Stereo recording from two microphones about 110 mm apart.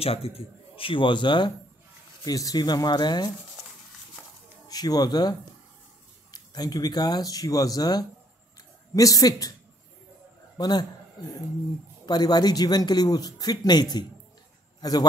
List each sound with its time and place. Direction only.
0.0 s speech: 65° left (ahead or behind); by 1.5 s 45° left (ahead or behind)
2.2 s speech: 35° left (ahead or behind)
4.6 s speech: 35° left (ahead or behind)
6.3 s speech: 35° left (ahead or behind)
10.6 s speech: 35° left (ahead or behind)
12.1 s a man's voice: 40° left (ahead or behind)